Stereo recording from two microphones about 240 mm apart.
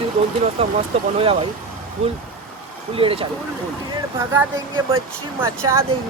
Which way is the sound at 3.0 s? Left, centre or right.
Right.